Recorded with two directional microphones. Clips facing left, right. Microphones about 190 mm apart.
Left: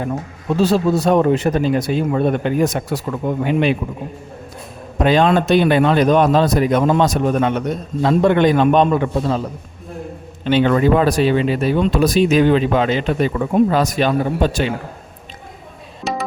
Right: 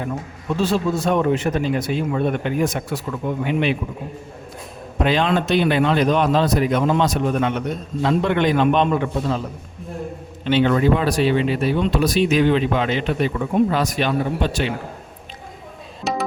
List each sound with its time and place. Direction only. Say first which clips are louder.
0.0 s speech: left 4 dB; 35° left (ahead or behind)
4.9 s speech: left 5 dB; 45° left (ahead or behind)
10.4 s a man's voice: left 2 dB; 45° left (ahead or behind)
16.1 s music: even; centre (ahead or behind)